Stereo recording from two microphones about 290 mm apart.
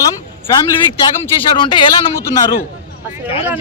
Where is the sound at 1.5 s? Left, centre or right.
Centre.